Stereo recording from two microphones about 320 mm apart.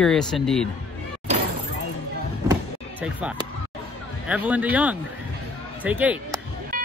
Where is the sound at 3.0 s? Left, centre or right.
Centre.